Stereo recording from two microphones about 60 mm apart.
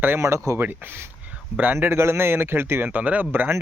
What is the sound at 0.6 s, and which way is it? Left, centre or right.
Speech, right.